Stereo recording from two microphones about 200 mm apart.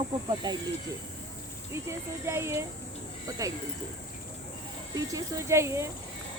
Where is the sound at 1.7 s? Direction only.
15° right (ahead or behind).